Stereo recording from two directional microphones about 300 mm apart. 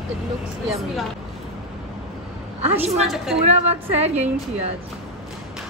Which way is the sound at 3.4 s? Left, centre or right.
Right.